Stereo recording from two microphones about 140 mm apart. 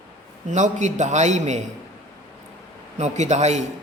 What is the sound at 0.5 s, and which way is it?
A man's voice, 55° right (ahead or behind).